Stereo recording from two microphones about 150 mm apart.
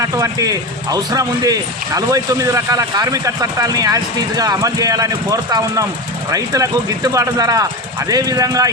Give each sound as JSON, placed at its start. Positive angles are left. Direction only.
{"t": 0.0, "sound": "speech", "side_deg": -20}